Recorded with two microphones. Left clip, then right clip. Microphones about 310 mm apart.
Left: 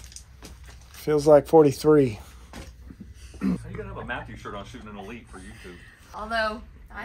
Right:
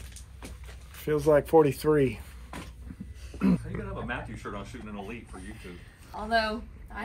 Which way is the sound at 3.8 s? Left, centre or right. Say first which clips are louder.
Left 3 dB; left.